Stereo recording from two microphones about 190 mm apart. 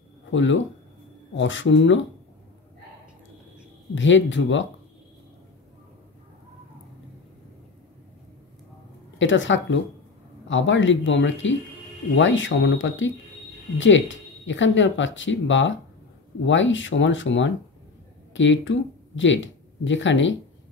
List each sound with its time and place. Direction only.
0.3 s speech: 75° left (ahead or behind)
3.9 s speech: 75° left (ahead or behind)
9.2 s speech: 80° left